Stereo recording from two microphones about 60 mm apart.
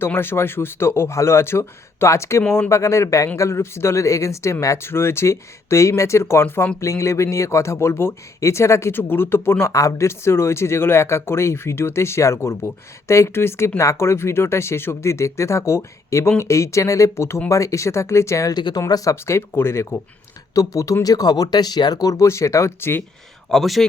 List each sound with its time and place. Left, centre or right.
0.0 s speech: left
4.8 s speech: left
6.7 s speech: left
8.9 s speech: left
9.7 s speech: left
17.5 s speech: left
19.1 s speech: left
20.5 s speech: left
21.0 s speech: left
22.8 s speech: left
23.5 s speech: centre